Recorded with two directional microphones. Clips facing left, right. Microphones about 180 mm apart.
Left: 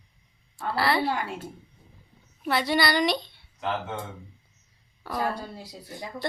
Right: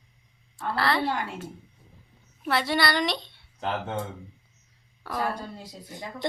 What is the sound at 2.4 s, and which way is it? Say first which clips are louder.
Speech: left 1 dB; centre (ahead or behind).